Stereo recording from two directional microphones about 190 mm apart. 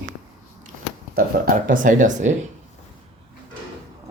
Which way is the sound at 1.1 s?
50° right (ahead or behind).